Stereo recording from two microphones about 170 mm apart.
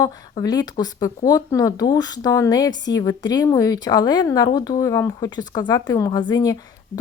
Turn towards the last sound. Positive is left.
turn(degrees=20)  # may be behind; listen again after turning